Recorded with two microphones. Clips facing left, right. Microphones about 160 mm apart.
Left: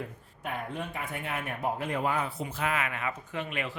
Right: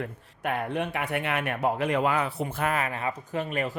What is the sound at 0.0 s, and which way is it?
Speech, 70° right (ahead or behind).